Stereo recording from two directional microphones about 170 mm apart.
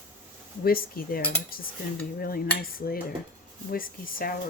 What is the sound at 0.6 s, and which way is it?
Speech, 60° left (ahead or behind).